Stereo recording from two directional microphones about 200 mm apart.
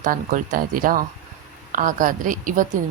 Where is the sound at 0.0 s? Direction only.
40° right (ahead or behind).